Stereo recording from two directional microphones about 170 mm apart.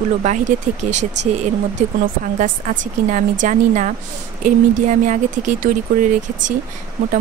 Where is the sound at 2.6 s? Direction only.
50° right (ahead or behind).